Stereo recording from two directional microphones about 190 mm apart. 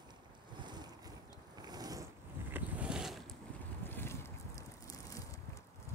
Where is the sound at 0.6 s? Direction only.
20° right (ahead or behind).